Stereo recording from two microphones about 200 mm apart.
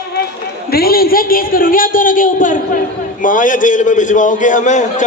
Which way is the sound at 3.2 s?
40° left (ahead or behind).